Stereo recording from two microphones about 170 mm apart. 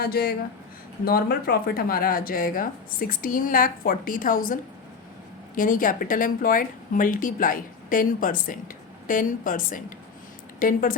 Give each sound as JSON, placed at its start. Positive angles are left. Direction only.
{"t": 0.0, "sound": "speech", "side_deg": 65}
{"t": 5.5, "sound": "speech", "side_deg": 55}